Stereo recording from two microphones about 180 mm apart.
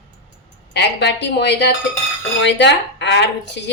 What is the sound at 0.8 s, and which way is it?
Speech, 70° left (ahead or behind).